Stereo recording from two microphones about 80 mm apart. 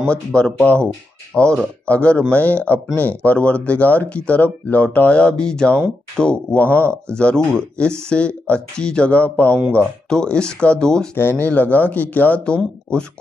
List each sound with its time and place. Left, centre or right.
0.0 s speech: centre
11.1 s speech: left